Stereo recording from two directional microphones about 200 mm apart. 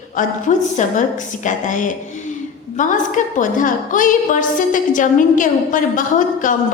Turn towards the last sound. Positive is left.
turn(degrees=40)  # may be behind; listen again after turning